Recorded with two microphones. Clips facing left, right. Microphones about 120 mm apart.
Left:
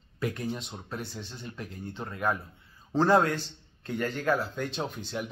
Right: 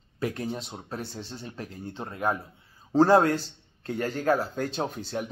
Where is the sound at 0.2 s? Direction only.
35° right (ahead or behind).